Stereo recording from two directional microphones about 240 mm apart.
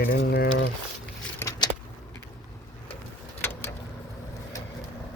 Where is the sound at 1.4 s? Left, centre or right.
Centre.